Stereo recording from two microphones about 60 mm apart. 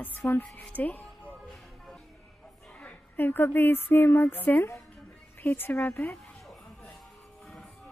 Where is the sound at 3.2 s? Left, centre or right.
Left.